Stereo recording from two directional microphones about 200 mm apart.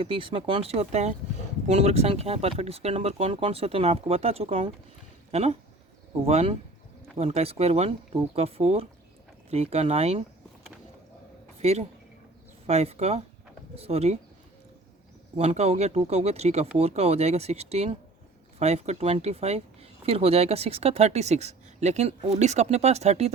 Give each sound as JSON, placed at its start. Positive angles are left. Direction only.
{"t": 0.0, "sound": "speech", "side_deg": -25}
{"t": 11.6, "sound": "speech", "side_deg": -30}
{"t": 15.4, "sound": "speech", "side_deg": -35}